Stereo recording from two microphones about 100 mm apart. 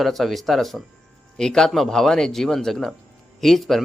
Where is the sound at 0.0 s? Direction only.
Centre (ahead or behind).